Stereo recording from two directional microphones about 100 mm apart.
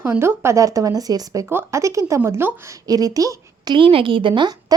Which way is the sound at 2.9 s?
40° right (ahead or behind).